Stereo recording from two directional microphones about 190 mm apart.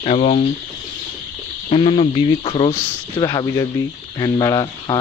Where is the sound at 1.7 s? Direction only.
30° left (ahead or behind).